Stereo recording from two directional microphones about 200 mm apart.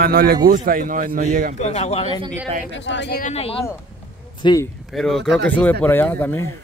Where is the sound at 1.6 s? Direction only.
30° left (ahead or behind).